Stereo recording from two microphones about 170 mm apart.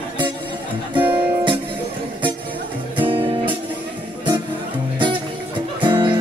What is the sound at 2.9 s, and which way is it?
Music, 30° right (ahead or behind).